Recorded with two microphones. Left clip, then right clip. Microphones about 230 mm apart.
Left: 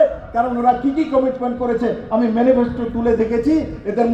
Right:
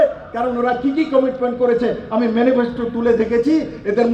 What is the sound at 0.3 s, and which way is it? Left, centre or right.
A man's voice, right.